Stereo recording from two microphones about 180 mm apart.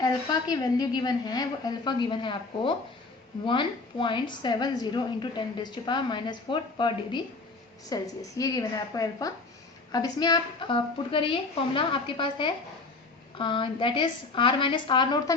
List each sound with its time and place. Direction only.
0.0 s a woman's voice: 20° left (ahead or behind)